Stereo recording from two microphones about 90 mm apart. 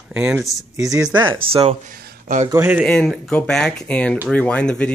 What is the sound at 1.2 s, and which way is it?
Speech, 80° right.